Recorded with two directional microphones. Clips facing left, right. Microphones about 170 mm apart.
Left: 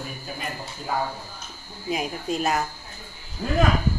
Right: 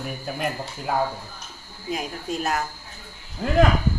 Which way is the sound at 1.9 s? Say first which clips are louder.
Left 2 dB; 5° left (ahead or behind).